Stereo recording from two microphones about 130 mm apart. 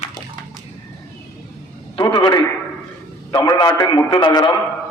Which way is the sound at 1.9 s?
40° left (ahead or behind).